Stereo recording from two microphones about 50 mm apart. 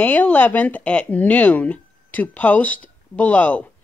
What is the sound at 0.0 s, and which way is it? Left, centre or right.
Speech, left.